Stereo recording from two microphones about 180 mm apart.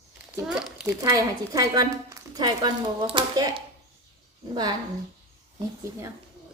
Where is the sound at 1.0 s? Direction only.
20° right (ahead or behind).